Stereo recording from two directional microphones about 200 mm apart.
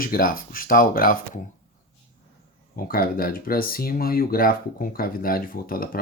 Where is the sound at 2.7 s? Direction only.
45° left (ahead or behind).